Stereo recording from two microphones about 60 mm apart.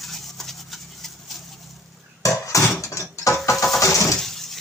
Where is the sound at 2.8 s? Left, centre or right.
Left.